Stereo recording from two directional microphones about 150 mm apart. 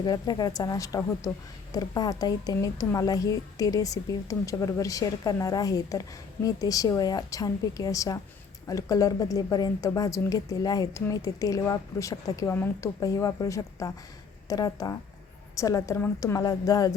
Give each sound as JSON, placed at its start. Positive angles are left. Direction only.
{"t": 0.0, "sound": "a woman's voice", "side_deg": 30}